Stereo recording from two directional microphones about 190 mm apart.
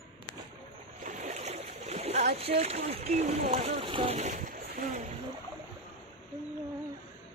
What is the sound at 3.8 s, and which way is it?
Speech, 30° right (ahead or behind).